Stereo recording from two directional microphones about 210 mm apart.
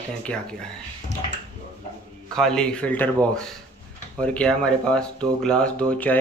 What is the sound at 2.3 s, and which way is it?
Speech, 5° left (ahead or behind).